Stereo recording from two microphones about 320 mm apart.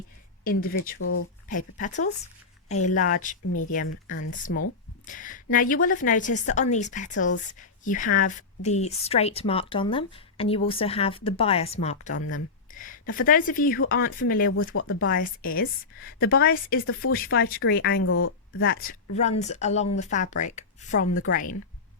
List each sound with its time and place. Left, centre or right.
0.4 s speech: left
14.8 s speech: left
15.4 s speech: left